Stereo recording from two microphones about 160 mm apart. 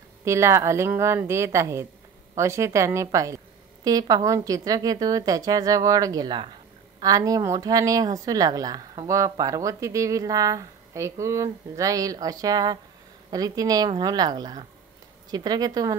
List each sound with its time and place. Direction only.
0.2 s a woman's voice: 15° right (ahead or behind)